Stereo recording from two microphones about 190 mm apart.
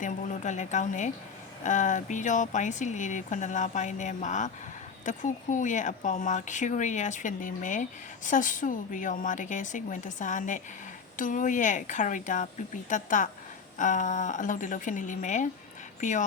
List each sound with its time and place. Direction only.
0.0 s a woman's voice: 40° left (ahead or behind)